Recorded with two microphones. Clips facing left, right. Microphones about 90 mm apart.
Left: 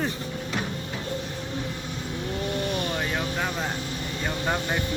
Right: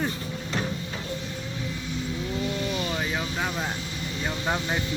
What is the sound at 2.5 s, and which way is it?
Vehicle, 55° left (ahead or behind).